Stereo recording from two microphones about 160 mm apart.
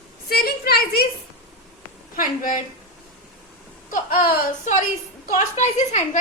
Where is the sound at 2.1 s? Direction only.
55° left (ahead or behind).